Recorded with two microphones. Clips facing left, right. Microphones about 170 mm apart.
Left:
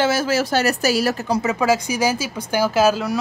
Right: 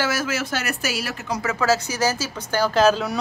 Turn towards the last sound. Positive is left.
turn(degrees=5)  # may be behind; listen again after turning